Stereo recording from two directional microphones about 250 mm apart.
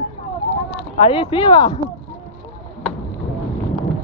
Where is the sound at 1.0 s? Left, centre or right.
Left.